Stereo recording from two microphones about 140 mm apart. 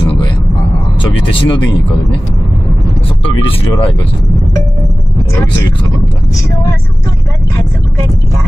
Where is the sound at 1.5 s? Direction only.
35° left (ahead or behind).